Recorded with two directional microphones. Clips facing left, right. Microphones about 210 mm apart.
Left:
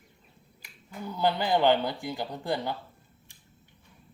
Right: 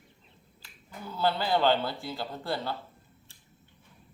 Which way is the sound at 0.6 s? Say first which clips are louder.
Left 4 dB; 15° left (ahead or behind).